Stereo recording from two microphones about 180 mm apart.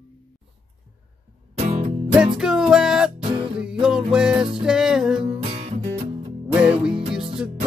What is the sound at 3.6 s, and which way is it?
Music, 5° right (ahead or behind).